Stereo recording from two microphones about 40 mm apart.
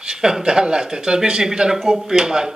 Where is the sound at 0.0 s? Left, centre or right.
Centre.